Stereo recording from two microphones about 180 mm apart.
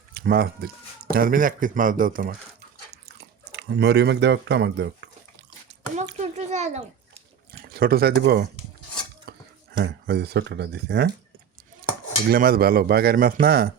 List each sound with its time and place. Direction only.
0.1 s speech: 60° right (ahead or behind)
3.5 s speech: 70° right (ahead or behind)
6.1 s a child's voice: 40° right (ahead or behind)
7.7 s speech: 55° right (ahead or behind)
9.3 s a sound: 65° right (ahead or behind)
9.7 s speech: 65° right (ahead or behind)
12.3 s speech: 55° right (ahead or behind)